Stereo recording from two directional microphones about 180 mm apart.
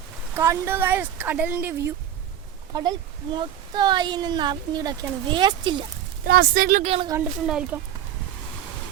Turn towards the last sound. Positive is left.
turn(degrees=-5)  # may be behind; listen again after turning